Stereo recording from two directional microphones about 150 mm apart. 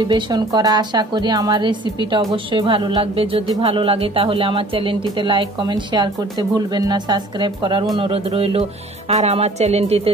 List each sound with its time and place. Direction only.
0.1 s a woman's voice: 25° right (ahead or behind); by 10.1 s 45° right (ahead or behind)